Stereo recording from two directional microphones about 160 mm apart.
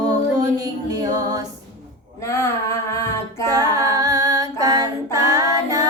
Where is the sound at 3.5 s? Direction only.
25° right (ahead or behind).